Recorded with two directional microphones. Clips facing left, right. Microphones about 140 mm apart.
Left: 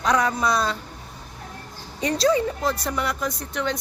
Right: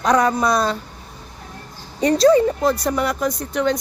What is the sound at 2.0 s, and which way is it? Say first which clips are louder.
Speech: right 7 dB; 40° right (ahead or behind).